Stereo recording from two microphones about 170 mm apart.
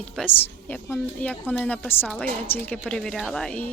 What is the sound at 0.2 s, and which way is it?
A woman's voice, 10° left (ahead or behind).